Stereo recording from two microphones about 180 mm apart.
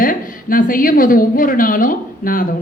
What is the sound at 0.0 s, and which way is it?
A woman's voice, 50° left (ahead or behind).